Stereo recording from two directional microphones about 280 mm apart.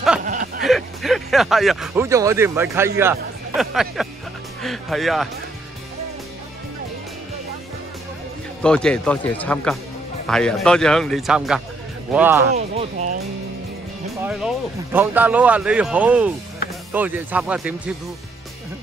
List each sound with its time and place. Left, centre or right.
0.2 s a sound: right
0.6 s speech: centre
8.6 s speech: centre
12.5 s speech: right
14.2 s speech: centre